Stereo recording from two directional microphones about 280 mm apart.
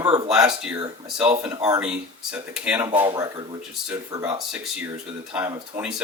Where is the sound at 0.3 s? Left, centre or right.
Centre.